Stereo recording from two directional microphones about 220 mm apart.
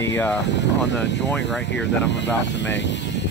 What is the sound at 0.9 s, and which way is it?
Speech, 55° left (ahead or behind).